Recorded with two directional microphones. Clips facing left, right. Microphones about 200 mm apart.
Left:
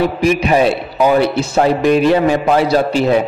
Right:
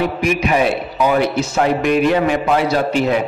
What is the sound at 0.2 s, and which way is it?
A man's voice, 30° left (ahead or behind).